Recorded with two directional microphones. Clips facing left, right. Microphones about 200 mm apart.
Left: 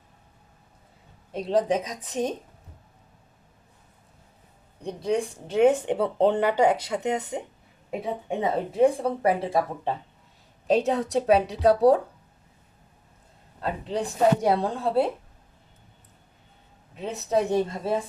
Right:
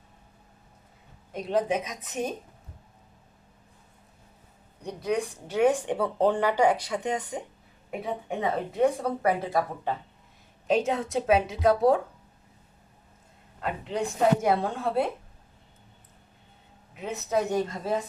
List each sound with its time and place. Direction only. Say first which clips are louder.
1.3 s a woman's voice: left 3 dB; 30° left (ahead or behind)
4.8 s a woman's voice: left 2 dB; 30° left (ahead or behind)
13.6 s a woman's voice: left 1 dB; 35° left (ahead or behind)
16.9 s a woman's voice: left 2 dB; 30° left (ahead or behind)